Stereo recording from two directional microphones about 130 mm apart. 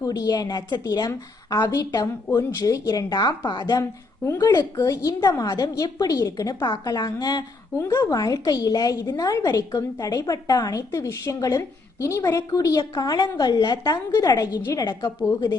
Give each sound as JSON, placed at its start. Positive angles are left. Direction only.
{"t": 0.0, "sound": "a woman's voice", "side_deg": 30}